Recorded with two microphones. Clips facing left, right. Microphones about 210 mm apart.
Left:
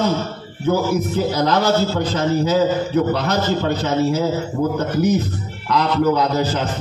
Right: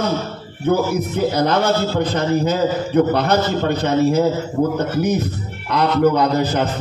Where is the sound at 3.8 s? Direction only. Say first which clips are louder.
Right 6 dB; 60° right (ahead or behind).